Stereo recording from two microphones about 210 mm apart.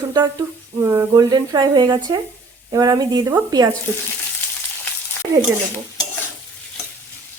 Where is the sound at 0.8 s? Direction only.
15° right (ahead or behind).